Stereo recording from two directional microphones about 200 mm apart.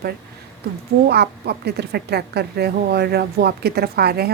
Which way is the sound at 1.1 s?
55° right (ahead or behind).